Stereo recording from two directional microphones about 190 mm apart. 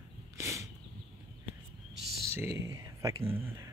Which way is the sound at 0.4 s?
15° right (ahead or behind).